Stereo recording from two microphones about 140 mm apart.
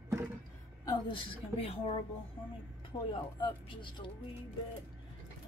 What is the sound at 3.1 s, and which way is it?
Speech, 35° left (ahead or behind).